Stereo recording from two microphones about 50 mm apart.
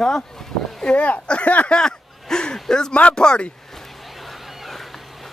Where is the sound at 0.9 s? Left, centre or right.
Left.